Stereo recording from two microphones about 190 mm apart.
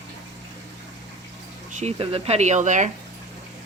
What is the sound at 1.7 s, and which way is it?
Speech, 35° right (ahead or behind).